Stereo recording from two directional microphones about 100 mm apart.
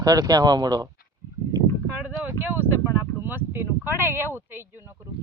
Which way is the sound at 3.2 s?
20° right (ahead or behind).